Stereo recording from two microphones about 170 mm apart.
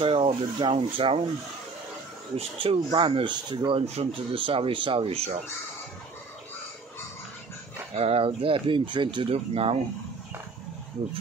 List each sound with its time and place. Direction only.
0.0 s speech: 30° right (ahead or behind)
2.3 s speech: 35° right (ahead or behind)
7.9 s speech: 35° right (ahead or behind)